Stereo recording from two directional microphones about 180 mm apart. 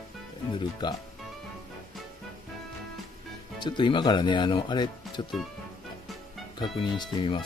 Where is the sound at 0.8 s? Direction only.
25° left (ahead or behind).